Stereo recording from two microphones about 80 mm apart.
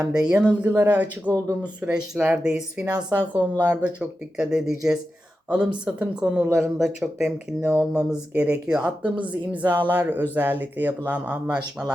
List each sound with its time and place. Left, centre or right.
0.0 s speech: centre
3.2 s speech: right